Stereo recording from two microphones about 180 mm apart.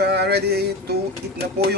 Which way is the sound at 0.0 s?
65° right (ahead or behind).